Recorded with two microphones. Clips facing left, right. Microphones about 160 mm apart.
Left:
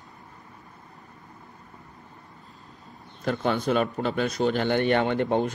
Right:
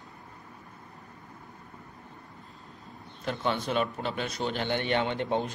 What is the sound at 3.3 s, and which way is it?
Speech, 45° left (ahead or behind).